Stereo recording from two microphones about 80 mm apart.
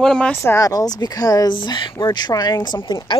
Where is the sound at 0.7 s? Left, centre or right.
Left.